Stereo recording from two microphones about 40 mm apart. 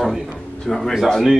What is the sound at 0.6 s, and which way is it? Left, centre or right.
Speech, centre.